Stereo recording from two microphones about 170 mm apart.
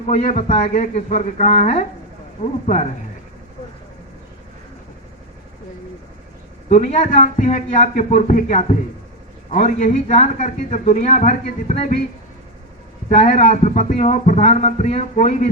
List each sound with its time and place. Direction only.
0.1 s speech: 40° left (ahead or behind)
6.7 s speech: 45° left (ahead or behind)
13.1 s speech: 55° left (ahead or behind)